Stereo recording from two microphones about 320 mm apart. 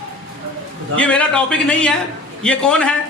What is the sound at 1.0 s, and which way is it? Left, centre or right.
Speech, centre.